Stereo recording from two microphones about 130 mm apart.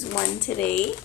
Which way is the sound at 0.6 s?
90° left.